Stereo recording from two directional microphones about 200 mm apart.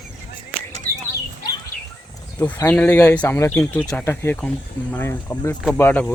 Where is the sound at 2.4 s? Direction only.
10° left (ahead or behind).